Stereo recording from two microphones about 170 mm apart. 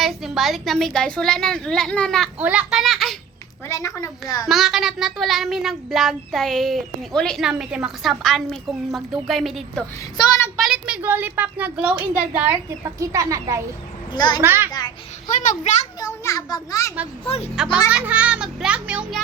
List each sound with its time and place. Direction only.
0.0 s speech: centre (ahead or behind)
2.4 s speech: 5° right (ahead or behind)
3.7 s a child's voice: 20° left (ahead or behind)
4.4 s speech: centre (ahead or behind)
10.2 s a child's voice: 20° left (ahead or behind)
10.6 s a child's voice: 5° right (ahead or behind)
14.1 s a child's voice: 25° left (ahead or behind)
14.4 s a child's voice: 15° right (ahead or behind)
14.7 s a child's voice: 25° left (ahead or behind)
15.3 s a child's voice: 50° left (ahead or behind)
16.0 s a child's voice: 20° left (ahead or behind)
17.2 s speech: 35° left (ahead or behind)
17.5 s a child's voice: 5° right (ahead or behind)